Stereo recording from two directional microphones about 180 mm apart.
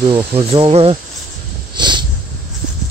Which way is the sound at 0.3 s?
30° right (ahead or behind).